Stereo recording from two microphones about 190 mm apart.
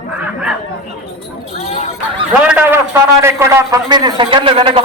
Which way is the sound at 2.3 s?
5° right (ahead or behind).